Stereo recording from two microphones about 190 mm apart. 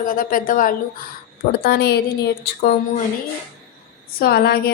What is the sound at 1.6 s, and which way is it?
A woman's voice, 55° left (ahead or behind).